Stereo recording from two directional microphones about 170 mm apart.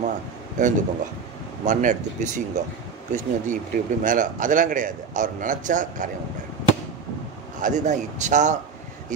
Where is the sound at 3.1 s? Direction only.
50° right (ahead or behind).